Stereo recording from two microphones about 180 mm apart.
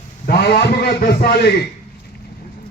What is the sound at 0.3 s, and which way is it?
A man's voice, 65° left (ahead or behind).